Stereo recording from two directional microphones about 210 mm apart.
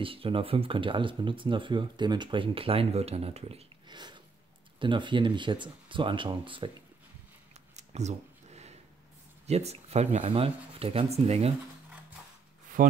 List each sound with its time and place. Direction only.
0.0 s speech: 25° right (ahead or behind)
7.7 s a sound: 30° right (ahead or behind)
9.5 s speech: 30° right (ahead or behind)
12.8 s speech: 40° right (ahead or behind)